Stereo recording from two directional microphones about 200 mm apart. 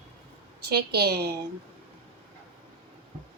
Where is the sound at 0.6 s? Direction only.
55° right (ahead or behind).